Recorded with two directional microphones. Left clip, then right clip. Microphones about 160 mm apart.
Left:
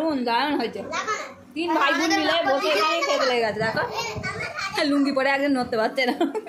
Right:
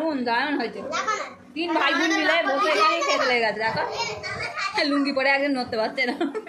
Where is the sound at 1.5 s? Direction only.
10° left (ahead or behind); by 6.2 s 25° left (ahead or behind).